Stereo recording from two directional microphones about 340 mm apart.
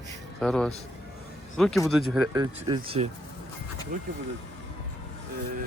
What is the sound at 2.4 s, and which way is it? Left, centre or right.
Speech, centre.